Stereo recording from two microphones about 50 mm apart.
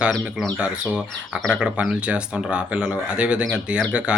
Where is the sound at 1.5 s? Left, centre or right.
Right.